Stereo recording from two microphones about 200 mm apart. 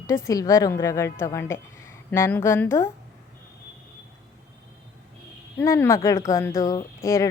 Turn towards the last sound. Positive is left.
turn(degrees=15)  # may be behind; listen again after turning